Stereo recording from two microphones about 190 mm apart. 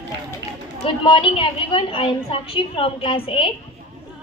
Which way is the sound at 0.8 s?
25° left (ahead or behind).